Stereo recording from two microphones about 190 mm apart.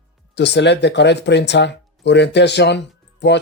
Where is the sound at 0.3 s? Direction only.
65° left (ahead or behind).